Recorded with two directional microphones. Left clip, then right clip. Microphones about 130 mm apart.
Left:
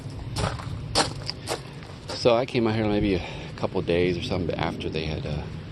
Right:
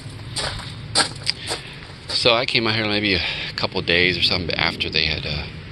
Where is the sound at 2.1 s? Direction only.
25° left (ahead or behind).